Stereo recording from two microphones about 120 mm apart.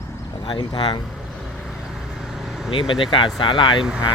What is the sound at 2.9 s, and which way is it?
Speech, 45° left (ahead or behind).